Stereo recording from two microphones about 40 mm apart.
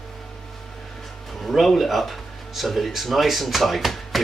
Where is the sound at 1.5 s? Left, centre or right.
Centre.